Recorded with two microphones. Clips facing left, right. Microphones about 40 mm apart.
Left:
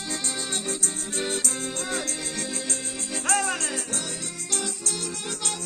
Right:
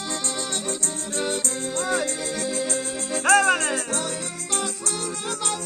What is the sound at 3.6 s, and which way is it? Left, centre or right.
Music, right.